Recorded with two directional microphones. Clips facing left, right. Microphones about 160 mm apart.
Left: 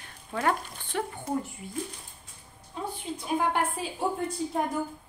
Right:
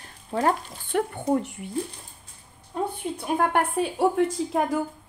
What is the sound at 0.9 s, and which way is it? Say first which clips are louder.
Speech: right 7 dB; 55° right (ahead or behind).